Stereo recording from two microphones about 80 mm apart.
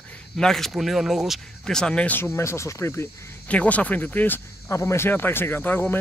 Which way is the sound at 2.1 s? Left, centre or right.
Left.